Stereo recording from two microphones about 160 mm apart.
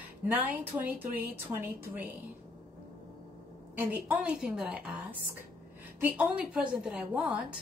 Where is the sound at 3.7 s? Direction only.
10° right (ahead or behind).